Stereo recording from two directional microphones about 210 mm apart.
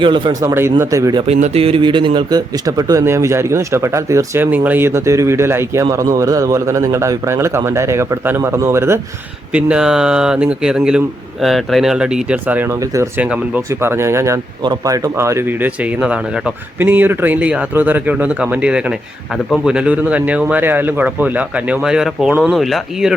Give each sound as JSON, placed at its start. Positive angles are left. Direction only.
{"t": 0.0, "sound": "speech", "side_deg": -25}
{"t": 0.4, "sound": "a man's voice", "side_deg": -10}
{"t": 1.3, "sound": "a man's voice", "side_deg": -30}